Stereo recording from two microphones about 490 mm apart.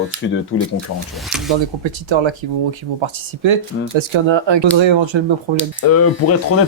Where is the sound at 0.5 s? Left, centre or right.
Left.